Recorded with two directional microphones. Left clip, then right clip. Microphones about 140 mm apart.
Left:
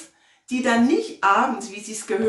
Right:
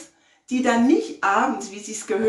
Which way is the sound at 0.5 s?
5° right (ahead or behind).